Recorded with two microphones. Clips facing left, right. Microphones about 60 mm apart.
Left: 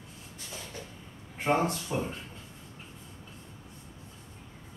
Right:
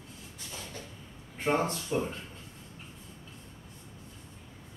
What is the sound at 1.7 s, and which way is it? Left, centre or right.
Speech, left.